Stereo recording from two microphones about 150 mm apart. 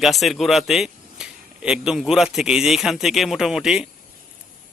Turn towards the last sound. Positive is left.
turn(degrees=-5)  # may be behind; listen again after turning